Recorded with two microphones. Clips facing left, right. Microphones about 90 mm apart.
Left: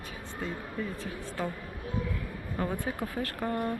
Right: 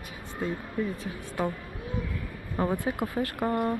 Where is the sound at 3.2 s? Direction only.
25° right (ahead or behind).